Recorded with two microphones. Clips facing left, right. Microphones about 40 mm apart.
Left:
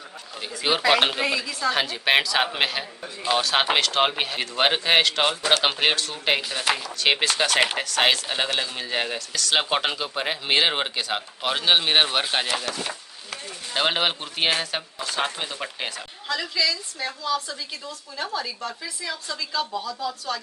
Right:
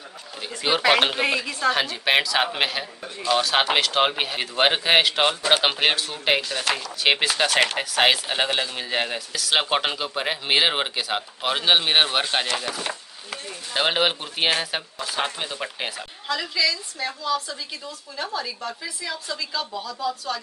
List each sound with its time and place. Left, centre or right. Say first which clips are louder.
0.6 s speech: right 1 dB; centre
1.3 s a woman's voice: right 2 dB; right
1.7 s speech: even; centre
6.6 s speech: left 1 dB; centre
7.0 s speech: right 2 dB; centre
12.6 s speech: right 1 dB; centre
13.7 s speech: right 1 dB; centre